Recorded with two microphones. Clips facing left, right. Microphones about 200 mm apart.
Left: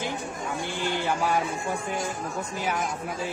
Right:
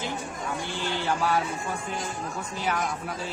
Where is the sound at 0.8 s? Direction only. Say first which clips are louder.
Left 3 dB; 50° left (ahead or behind).